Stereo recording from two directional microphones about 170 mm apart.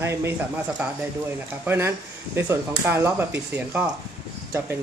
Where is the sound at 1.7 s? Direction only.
15° right (ahead or behind).